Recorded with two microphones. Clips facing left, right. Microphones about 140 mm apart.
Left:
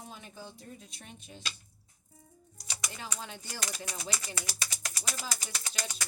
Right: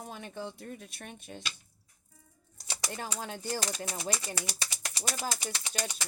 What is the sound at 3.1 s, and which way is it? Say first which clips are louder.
Speech: right 4 dB; 50° right (ahead or behind).